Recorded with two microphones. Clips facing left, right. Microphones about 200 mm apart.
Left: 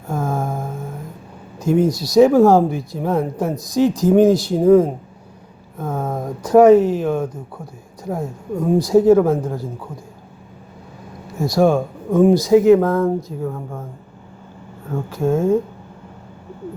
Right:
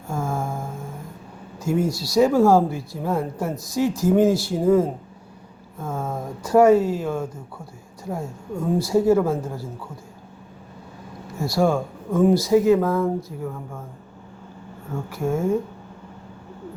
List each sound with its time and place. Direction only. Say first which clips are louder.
0.1 s a sound: left 4 dB; 20° left (ahead or behind)
1.5 s speech: left 6 dB; 20° left (ahead or behind)
11.3 s speech: left 5 dB; 20° left (ahead or behind)
14.9 s speech: left 6 dB; 15° left (ahead or behind)